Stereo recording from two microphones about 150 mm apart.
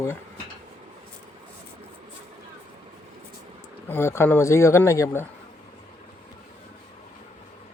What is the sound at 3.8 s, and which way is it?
Speech, 15° left (ahead or behind).